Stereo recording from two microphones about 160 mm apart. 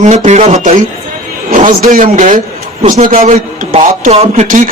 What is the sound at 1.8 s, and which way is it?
A man's voice, 55° right (ahead or behind).